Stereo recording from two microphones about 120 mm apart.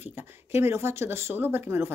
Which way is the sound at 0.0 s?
20° right (ahead or behind).